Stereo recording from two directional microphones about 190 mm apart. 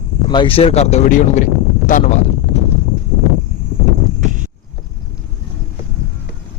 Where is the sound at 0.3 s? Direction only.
25° left (ahead or behind).